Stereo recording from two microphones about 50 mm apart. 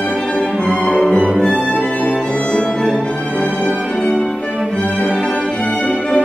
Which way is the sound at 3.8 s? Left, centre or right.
Centre.